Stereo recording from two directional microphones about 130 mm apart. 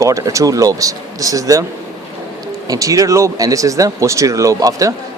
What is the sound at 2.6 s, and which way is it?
Speech, 25° right (ahead or behind).